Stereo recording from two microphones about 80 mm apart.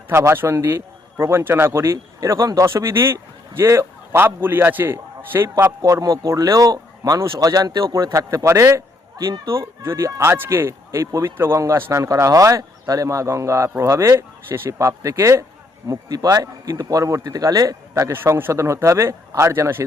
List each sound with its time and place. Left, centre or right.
0.1 s a man's voice: right
5.8 s speech: right
8.1 s a man's voice: right
9.1 s speech: right
9.5 s a man's voice: right
15.9 s speech: right
18.1 s a man's voice: right